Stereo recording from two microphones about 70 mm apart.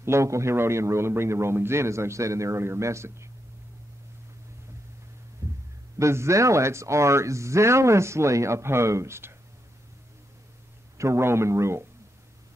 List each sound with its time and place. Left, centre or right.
0.0 s a man's voice: right
5.4 s a sound: right
5.9 s speech: right
11.0 s a man's voice: right